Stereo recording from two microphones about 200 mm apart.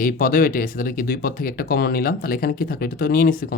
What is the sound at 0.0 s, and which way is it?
Speech, 45° left (ahead or behind).